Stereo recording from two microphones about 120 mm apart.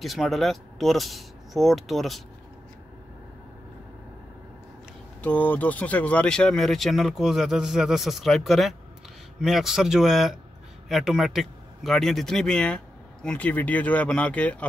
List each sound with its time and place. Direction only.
0.0 s speech: centre (ahead or behind)
5.2 s speech: 15° left (ahead or behind)